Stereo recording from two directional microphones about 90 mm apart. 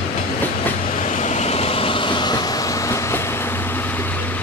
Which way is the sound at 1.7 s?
85° left.